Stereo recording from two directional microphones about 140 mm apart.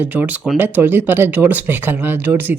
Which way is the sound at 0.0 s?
10° right (ahead or behind).